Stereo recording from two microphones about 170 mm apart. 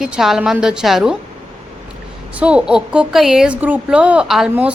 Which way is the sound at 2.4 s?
5° right (ahead or behind).